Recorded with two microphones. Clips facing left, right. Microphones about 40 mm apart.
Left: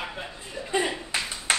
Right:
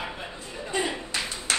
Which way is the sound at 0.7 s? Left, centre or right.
Centre.